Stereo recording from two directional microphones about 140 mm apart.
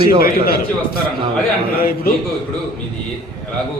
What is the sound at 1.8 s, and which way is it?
Speech, 90° left.